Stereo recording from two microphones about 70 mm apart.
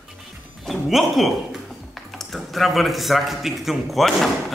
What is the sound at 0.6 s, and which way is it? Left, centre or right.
Speech, centre.